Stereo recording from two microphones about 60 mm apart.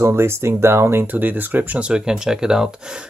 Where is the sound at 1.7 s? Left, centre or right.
Centre.